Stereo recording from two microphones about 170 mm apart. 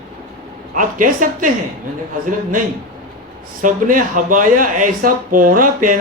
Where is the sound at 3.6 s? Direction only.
50° right (ahead or behind).